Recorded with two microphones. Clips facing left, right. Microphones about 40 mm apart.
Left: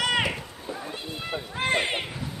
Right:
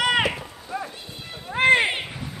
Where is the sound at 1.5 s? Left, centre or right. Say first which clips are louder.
Right 9 dB; right.